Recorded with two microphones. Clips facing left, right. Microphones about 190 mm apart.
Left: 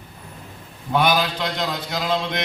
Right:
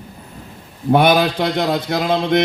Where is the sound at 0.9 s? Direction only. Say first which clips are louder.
Right 7 dB; 55° right (ahead or behind).